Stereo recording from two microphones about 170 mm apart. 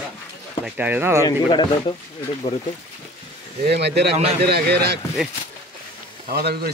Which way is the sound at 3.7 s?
75° right (ahead or behind).